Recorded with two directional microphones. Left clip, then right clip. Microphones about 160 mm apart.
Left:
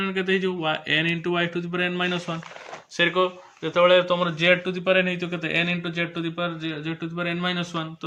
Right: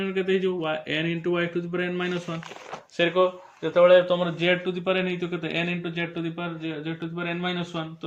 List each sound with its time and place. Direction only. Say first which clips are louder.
0.0 s speech: left 1 dB; 20° left (ahead or behind)